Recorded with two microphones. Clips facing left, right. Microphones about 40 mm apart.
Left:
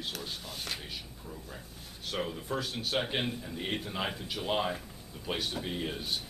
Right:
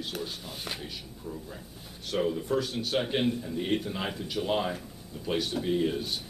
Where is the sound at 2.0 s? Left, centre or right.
Centre.